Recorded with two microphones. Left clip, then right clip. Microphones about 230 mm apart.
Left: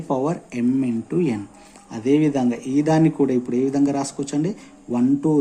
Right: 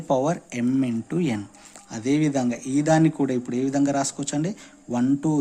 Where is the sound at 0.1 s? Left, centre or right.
Right.